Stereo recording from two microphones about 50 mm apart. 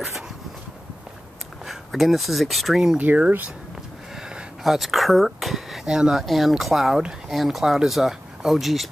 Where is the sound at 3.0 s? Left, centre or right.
Right.